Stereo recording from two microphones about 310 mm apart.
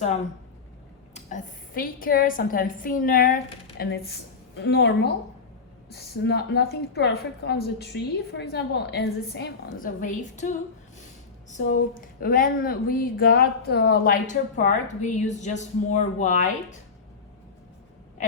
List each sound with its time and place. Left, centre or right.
1.1 s a woman's voice: left